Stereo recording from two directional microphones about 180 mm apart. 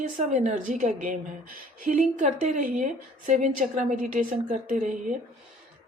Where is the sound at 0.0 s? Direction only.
45° right (ahead or behind).